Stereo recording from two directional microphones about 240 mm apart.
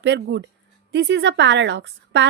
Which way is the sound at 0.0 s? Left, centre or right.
Right.